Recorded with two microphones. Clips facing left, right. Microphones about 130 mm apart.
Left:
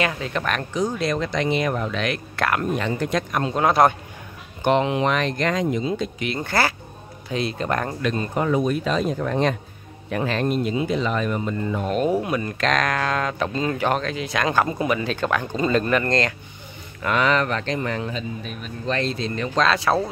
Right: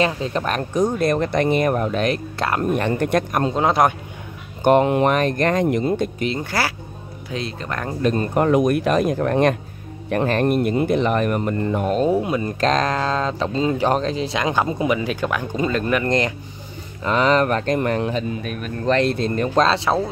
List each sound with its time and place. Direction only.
0.0 s speech: 30° right (ahead or behind)
0.9 s speech: 55° right (ahead or behind); by 2.6 s 30° right (ahead or behind)
2.7 s speech: 55° right (ahead or behind)
3.5 s speech: 20° right (ahead or behind)
4.6 s speech: 50° right (ahead or behind)
6.3 s speech: 10° right (ahead or behind)
8.0 s speech: 45° right (ahead or behind)
8.5 s speech: 70° right (ahead or behind)
11.9 s speech: 30° right (ahead or behind)
14.4 s speech: 20° right (ahead or behind)
17.0 s speech: 30° right (ahead or behind)
17.7 s speech: 55° right (ahead or behind)
19.6 s speech: 25° right (ahead or behind)